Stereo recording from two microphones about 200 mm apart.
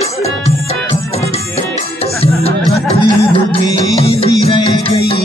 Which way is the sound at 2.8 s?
30° left (ahead or behind).